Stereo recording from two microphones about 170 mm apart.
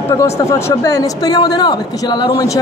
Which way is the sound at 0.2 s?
20° left (ahead or behind).